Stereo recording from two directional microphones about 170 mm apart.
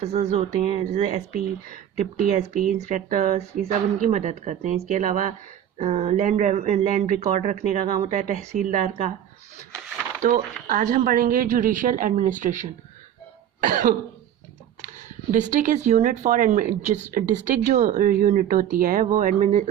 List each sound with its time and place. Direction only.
0.0 s a woman's voice: 40° right (ahead or behind)
10.2 s a woman's voice: 50° right (ahead or behind)
13.6 s cough: 55° right (ahead or behind)
15.3 s a woman's voice: 45° right (ahead or behind)